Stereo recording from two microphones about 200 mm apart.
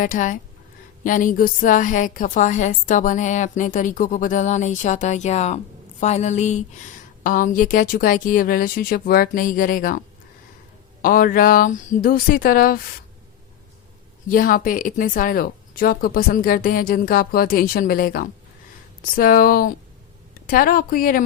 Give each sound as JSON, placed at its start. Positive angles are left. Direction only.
{"t": 0.0, "sound": "a woman's voice", "side_deg": 40}
{"t": 11.0, "sound": "speech", "side_deg": 45}
{"t": 14.3, "sound": "speech", "side_deg": 45}